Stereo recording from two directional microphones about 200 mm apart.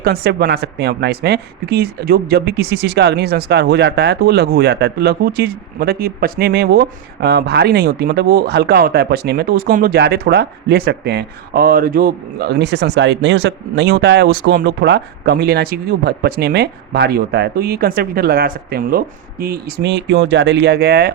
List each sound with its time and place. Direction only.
0.0 s speech: 50° right (ahead or behind)